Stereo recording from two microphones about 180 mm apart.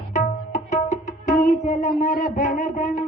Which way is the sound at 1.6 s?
40° left (ahead or behind).